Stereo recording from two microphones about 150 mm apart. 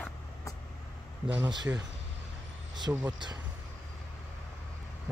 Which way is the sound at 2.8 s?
25° right (ahead or behind).